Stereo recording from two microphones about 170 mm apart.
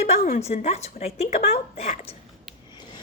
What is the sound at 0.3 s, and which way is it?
A woman's voice, 40° left (ahead or behind).